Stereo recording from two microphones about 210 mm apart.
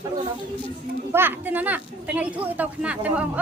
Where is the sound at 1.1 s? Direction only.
10° right (ahead or behind).